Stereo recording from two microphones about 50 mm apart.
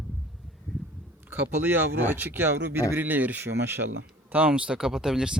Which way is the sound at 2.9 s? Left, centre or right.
Right.